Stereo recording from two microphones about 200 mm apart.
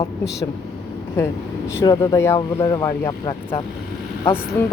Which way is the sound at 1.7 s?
15° left (ahead or behind).